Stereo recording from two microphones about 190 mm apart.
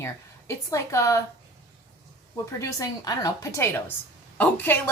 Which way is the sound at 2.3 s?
15° left (ahead or behind).